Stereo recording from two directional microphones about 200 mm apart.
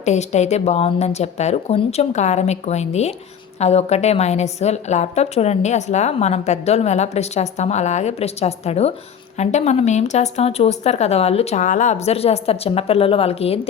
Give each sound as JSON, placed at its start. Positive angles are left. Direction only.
{"t": 0.0, "sound": "a woman's voice", "side_deg": 35}